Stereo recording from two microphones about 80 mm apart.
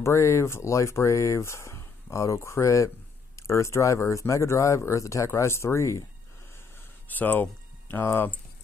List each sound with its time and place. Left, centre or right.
0.0 s speech: left
7.1 s speech: left